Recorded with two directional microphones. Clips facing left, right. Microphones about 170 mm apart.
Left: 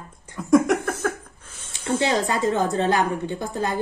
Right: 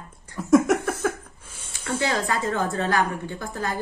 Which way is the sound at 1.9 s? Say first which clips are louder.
Left 3 dB; 20° left (ahead or behind).